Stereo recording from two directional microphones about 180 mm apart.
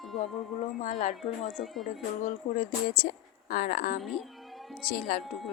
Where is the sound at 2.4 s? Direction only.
40° left (ahead or behind).